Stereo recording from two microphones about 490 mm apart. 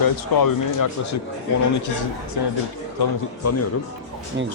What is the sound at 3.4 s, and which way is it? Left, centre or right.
Speech, left.